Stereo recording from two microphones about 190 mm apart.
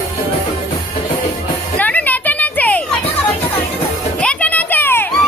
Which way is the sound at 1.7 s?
10° left (ahead or behind).